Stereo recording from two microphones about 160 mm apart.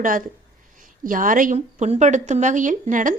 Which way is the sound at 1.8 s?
45° right (ahead or behind).